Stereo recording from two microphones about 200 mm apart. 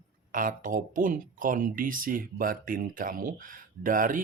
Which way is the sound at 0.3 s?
40° right (ahead or behind).